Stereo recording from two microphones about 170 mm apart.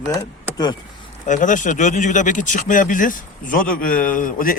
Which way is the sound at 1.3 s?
50° left (ahead or behind).